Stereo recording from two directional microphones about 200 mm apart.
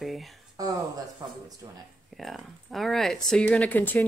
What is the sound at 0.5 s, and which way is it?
Speech, 20° right (ahead or behind).